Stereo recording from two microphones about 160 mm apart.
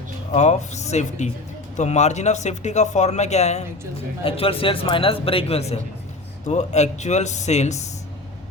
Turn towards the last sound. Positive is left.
turn(degrees=45)  # may be behind; listen again after turning